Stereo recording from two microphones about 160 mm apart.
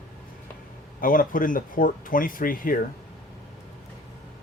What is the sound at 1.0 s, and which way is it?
Speech, 60° left (ahead or behind).